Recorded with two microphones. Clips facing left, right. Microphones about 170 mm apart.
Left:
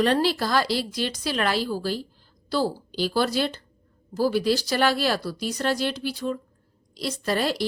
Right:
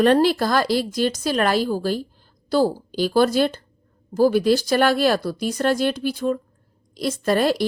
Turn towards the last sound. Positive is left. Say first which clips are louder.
# right 6 dB
turn(degrees=-50)  # may be behind; listen again after turning